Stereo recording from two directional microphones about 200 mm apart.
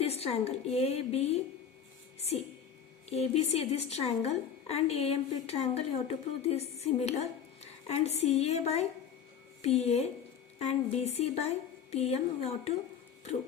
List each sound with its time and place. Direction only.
0.0 s a woman's voice: 30° left (ahead or behind)